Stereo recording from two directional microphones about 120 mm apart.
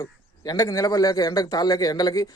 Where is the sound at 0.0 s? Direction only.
30° left (ahead or behind).